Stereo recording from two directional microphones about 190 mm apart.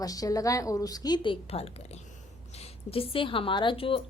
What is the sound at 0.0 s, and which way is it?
A woman's voice, 20° left (ahead or behind).